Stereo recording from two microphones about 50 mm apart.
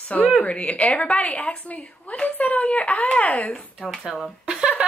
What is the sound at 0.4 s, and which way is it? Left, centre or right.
A woman's voice, left.